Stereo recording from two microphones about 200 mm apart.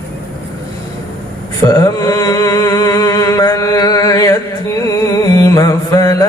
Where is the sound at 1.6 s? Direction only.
15° left (ahead or behind).